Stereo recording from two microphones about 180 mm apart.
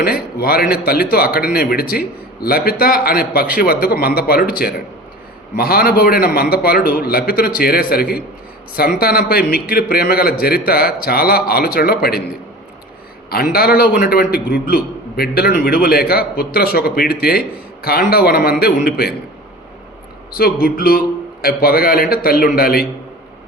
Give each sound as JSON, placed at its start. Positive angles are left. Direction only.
{"t": 0.0, "sound": "a man's voice", "side_deg": 60}
{"t": 13.3, "sound": "a man's voice", "side_deg": 60}
{"t": 20.3, "sound": "a man's voice", "side_deg": 55}